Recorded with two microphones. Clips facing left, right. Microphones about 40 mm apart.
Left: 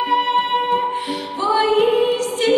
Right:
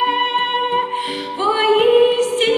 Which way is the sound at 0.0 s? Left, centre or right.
Right.